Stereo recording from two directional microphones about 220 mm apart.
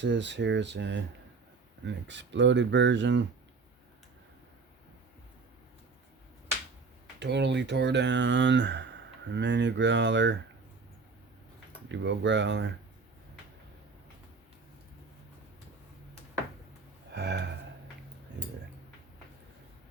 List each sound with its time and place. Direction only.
0.0 s speech: 55° right (ahead or behind)
7.2 s speech: 50° right (ahead or behind)
11.9 s speech: 55° right (ahead or behind)
17.1 s a sound: 50° right (ahead or behind)